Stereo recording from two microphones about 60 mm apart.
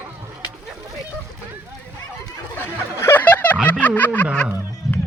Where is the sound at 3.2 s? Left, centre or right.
Left.